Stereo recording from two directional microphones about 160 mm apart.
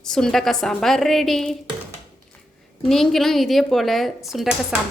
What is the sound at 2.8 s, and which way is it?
Speech, centre (ahead or behind).